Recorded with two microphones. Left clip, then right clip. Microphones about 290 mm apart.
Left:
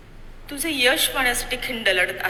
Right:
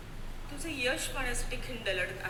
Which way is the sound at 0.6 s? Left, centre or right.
Left.